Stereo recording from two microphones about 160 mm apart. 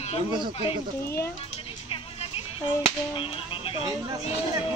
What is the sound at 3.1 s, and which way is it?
Whip, 35° left (ahead or behind).